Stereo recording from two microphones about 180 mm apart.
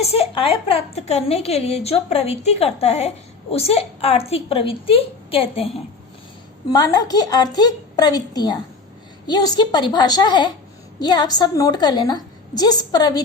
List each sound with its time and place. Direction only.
0.0 s a woman's voice: 35° left (ahead or behind)
6.7 s a woman's voice: 20° left (ahead or behind)